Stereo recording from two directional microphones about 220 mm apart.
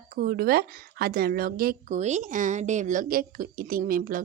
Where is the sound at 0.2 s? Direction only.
45° right (ahead or behind).